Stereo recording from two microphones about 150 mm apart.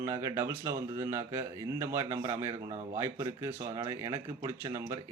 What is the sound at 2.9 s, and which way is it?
Speech, 20° right (ahead or behind).